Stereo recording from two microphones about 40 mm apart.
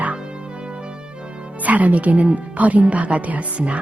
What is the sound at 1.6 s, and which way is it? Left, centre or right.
Speech, right.